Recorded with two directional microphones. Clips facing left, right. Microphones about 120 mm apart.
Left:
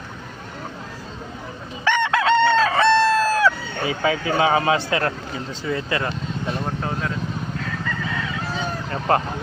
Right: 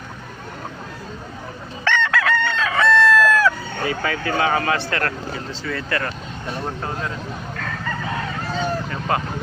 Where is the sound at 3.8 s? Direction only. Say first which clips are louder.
Left 2 dB; 20° left (ahead or behind).